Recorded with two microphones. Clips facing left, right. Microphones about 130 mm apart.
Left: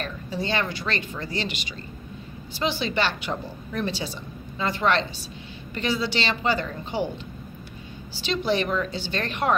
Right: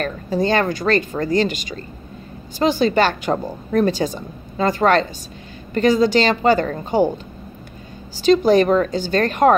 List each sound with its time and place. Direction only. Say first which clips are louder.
0.0 s a woman's voice: right 10 dB; 45° right (ahead or behind)
8.2 s a woman's voice: right 11 dB; 45° right (ahead or behind)